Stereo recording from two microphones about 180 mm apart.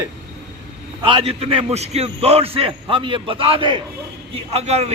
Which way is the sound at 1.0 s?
30° right (ahead or behind).